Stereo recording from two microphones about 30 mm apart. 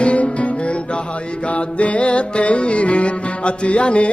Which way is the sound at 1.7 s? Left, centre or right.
Left.